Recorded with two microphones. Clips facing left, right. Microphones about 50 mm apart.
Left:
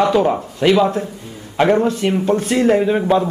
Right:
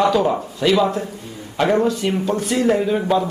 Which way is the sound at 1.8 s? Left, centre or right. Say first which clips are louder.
Left 2 dB; left.